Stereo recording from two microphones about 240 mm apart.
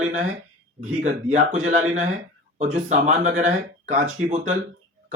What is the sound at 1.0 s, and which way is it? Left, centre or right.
Speech, right.